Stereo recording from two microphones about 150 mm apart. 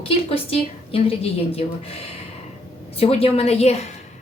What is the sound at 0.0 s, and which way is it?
A woman's voice, 40° left (ahead or behind).